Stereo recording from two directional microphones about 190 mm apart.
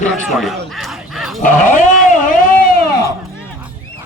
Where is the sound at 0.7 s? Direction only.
Centre (ahead or behind).